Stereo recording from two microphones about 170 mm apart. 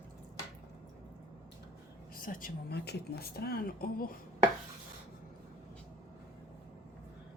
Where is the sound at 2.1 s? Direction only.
55° left (ahead or behind).